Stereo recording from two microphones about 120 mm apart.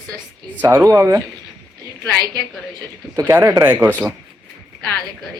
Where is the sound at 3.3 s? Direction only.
20° right (ahead or behind).